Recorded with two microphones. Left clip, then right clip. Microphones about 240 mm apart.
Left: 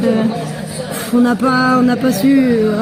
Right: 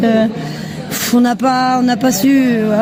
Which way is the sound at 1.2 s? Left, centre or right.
Right.